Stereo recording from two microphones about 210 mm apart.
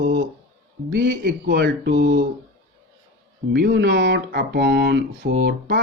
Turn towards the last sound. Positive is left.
turn(degrees=-50)  # may be behind; listen again after turning